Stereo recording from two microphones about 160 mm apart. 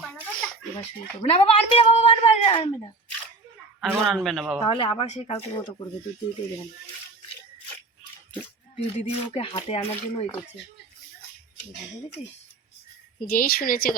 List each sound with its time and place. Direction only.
0.8 s speech: 40° left (ahead or behind)
3.8 s a man's voice: centre (ahead or behind)
4.6 s speech: 35° left (ahead or behind)
8.7 s speech: 35° left (ahead or behind)
13.1 s speech: 65° left (ahead or behind)